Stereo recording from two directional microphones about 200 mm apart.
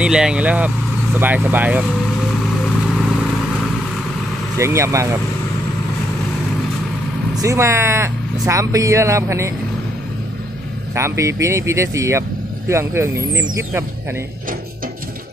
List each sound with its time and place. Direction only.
0.0 s speech: 5° right (ahead or behind)
4.6 s speech: 15° right (ahead or behind)
7.4 s speech: 15° right (ahead or behind)
11.0 s speech: 15° right (ahead or behind)